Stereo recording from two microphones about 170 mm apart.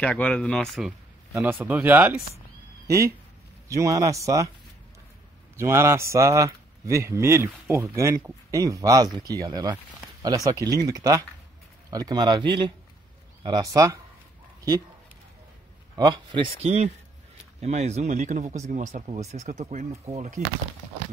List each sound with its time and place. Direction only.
0.0 s speech: 5° left (ahead or behind)
1.3 s speech: 15° right (ahead or behind)
3.6 s speech: 20° right (ahead or behind)
5.6 s speech: 15° right (ahead or behind)
16.0 s speech: 25° right (ahead or behind); by 20.4 s 40° right (ahead or behind)